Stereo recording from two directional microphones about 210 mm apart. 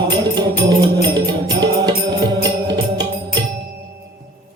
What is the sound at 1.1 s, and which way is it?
Music, 20° right (ahead or behind).